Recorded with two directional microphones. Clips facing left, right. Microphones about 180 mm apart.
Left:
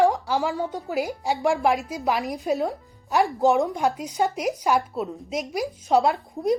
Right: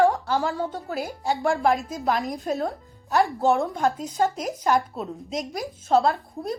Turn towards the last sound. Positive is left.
turn(degrees=0)  # may be behind; listen again after turning